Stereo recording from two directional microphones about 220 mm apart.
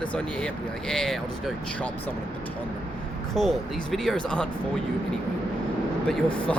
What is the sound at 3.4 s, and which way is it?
Speech, centre (ahead or behind).